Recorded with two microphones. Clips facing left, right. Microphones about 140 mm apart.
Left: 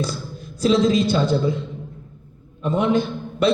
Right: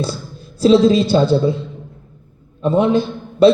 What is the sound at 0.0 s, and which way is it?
A woman's voice, 30° right (ahead or behind).